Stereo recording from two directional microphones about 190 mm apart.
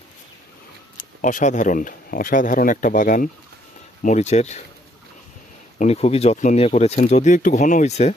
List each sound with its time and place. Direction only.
0.9 s speech: 40° left (ahead or behind)
5.8 s speech: 35° left (ahead or behind)